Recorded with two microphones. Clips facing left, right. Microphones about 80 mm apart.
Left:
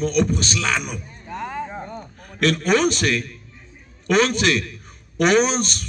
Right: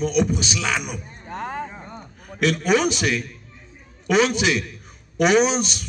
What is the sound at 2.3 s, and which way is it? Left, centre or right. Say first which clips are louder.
A man's voice: left 1 dB; centre.